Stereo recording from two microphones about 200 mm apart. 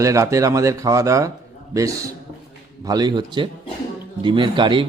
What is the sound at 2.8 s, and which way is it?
Speech, 20° right (ahead or behind).